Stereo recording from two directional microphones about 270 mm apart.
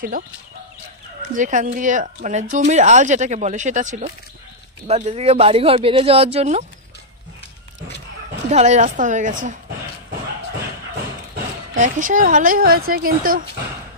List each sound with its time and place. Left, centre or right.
1.3 s speech: right
8.5 s speech: right
11.7 s speech: right